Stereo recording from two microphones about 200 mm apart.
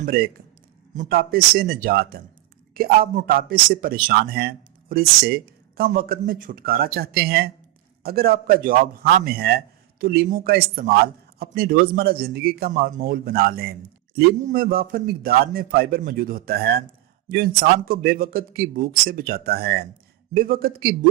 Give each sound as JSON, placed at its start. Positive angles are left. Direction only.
{"t": 0.0, "sound": "a man's voice", "side_deg": -50}